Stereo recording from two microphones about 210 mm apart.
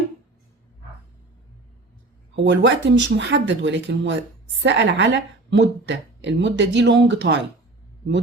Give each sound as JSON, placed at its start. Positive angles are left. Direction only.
{"t": 2.3, "sound": "a woman's voice", "side_deg": -60}